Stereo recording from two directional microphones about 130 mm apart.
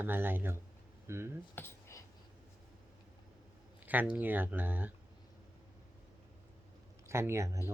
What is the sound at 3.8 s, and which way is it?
Speech, 15° right (ahead or behind).